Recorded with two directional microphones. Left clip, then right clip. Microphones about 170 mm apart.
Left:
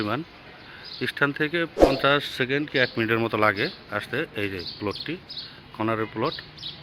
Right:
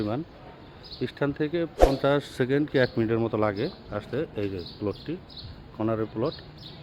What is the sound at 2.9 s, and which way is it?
Speech, 10° right (ahead or behind).